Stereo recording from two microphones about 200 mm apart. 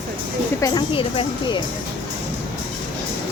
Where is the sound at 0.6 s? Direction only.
20° left (ahead or behind).